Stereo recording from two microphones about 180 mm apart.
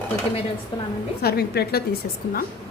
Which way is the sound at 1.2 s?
60° left (ahead or behind).